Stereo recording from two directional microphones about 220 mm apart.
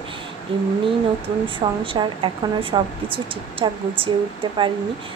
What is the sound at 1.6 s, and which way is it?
A woman's voice, 20° right (ahead or behind).